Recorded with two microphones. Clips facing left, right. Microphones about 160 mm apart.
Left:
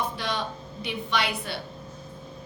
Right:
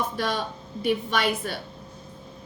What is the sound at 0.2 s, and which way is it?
A woman's voice, 45° right (ahead or behind).